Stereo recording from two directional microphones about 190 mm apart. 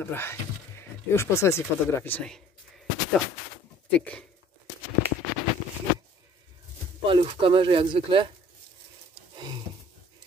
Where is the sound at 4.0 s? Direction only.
5° left (ahead or behind).